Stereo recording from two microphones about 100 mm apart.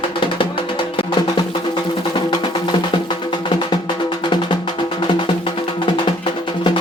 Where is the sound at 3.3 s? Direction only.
55° left (ahead or behind).